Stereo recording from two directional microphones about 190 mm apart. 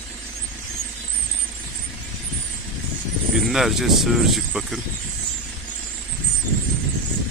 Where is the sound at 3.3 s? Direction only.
Centre (ahead or behind).